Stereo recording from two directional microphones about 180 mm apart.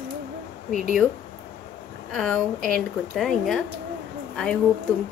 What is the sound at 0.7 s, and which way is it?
Speech, 45° left (ahead or behind).